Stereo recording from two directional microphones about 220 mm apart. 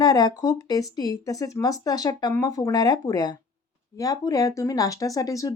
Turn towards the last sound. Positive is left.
turn(degrees=15)  # may be behind; listen again after turning